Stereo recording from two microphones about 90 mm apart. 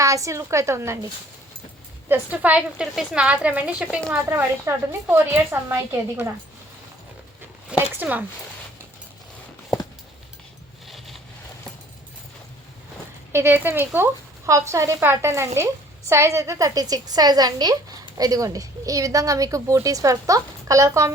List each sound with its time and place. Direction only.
0.0 s speech: 35° right (ahead or behind)
2.0 s a woman's voice: 15° right (ahead or behind)
4.3 s a woman's voice: 25° right (ahead or behind)
7.7 s a sound: 20° right (ahead or behind)
10.8 s a sound: centre (ahead or behind)
13.3 s speech: 25° right (ahead or behind)